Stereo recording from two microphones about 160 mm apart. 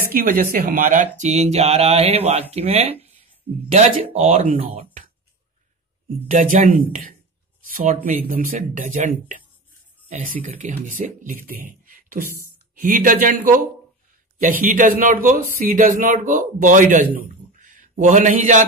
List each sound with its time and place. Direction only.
0.1 s speech: 60° right (ahead or behind); by 4.5 s 40° right (ahead or behind)
6.2 s a man's voice: 55° right (ahead or behind)
11.8 s beatboxing: 60° right (ahead or behind)
12.8 s a man's voice: 60° right (ahead or behind)
14.4 s a man's voice: 55° right (ahead or behind)
17.3 s a sound: 55° right (ahead or behind)